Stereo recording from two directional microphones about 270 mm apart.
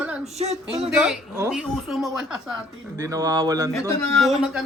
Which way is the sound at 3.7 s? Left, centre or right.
Centre.